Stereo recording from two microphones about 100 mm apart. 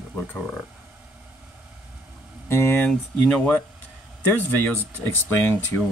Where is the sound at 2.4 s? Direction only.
25° left (ahead or behind).